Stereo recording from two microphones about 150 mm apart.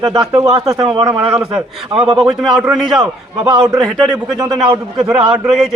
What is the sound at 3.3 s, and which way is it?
Speech, 30° right (ahead or behind).